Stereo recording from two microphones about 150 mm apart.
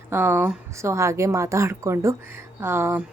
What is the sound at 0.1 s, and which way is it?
A woman's voice, 15° right (ahead or behind).